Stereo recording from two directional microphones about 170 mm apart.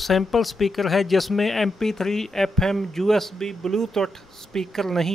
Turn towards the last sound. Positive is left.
turn(degrees=0)  # may be behind; listen again after turning